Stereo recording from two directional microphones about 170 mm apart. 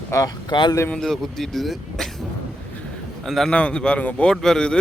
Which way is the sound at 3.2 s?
Centre (ahead or behind).